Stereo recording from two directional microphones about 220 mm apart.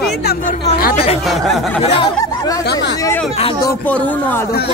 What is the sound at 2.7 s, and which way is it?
Speech, 50° left (ahead or behind).